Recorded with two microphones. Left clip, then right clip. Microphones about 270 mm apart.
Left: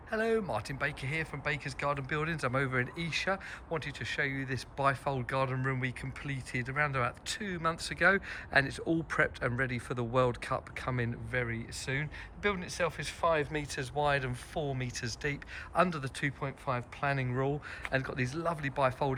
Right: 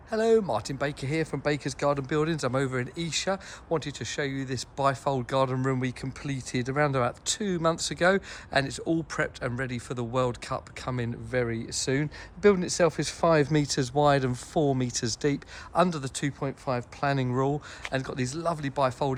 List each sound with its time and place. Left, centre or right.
0.1 s speech: centre